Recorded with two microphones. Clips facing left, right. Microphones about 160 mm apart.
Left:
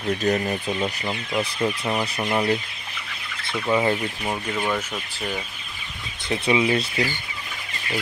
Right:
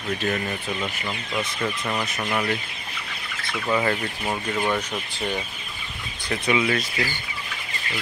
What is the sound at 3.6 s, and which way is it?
Speech, 15° left (ahead or behind).